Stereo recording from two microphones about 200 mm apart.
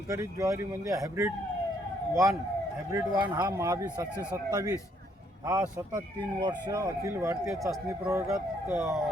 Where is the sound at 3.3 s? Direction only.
20° right (ahead or behind).